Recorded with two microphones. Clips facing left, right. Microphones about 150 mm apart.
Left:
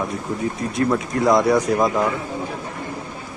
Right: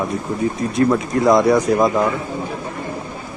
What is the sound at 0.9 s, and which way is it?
Speech, centre (ahead or behind).